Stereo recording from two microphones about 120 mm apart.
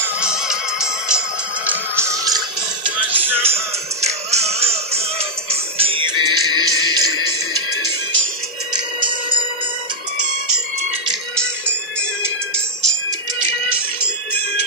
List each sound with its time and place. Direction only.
0.2 s music: 5° right (ahead or behind)
1.7 s music: 20° right (ahead or behind)
3.0 s music: 15° right (ahead or behind)
3.5 s music: 65° right (ahead or behind); by 7.0 s 35° right (ahead or behind)